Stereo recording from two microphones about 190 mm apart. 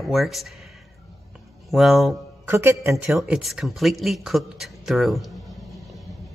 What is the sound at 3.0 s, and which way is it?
Speech, 5° right (ahead or behind).